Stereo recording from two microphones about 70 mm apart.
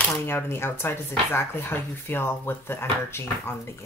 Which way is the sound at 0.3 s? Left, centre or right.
Left.